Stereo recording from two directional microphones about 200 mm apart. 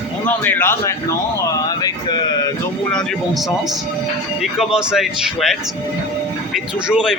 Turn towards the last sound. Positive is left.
turn(degrees=-5)  # may be behind; listen again after turning